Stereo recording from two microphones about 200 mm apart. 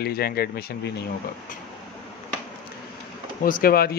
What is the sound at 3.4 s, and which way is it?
Speech, 45° left (ahead or behind).